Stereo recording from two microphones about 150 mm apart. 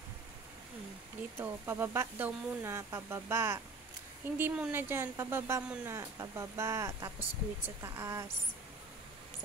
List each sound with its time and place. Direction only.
1.4 s speech: 15° right (ahead or behind)